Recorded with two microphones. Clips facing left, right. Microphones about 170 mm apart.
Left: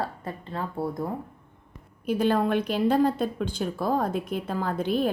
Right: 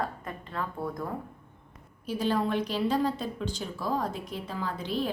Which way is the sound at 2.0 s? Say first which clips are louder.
Left 5 dB; 55° left (ahead or behind).